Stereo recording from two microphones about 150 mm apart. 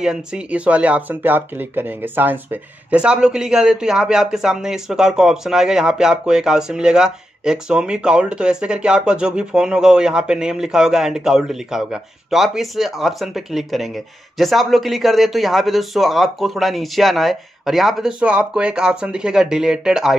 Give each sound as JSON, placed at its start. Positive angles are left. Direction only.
{"t": 0.0, "sound": "speech", "side_deg": -5}